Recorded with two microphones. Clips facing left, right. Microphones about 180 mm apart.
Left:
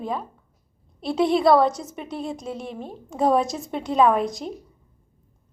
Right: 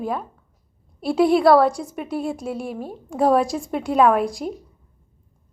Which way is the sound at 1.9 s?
5° right (ahead or behind).